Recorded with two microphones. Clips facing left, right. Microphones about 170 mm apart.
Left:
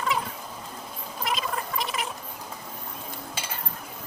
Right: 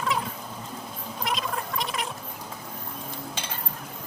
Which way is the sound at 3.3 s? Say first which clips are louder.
Even; 5° left (ahead or behind).